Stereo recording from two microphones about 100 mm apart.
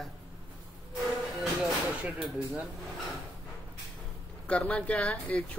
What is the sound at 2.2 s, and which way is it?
Speech, centre (ahead or behind).